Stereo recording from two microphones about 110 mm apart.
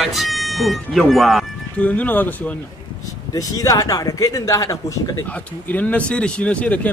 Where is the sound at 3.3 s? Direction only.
35° left (ahead or behind).